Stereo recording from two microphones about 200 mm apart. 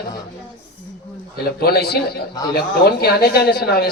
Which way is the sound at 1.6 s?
50° left (ahead or behind).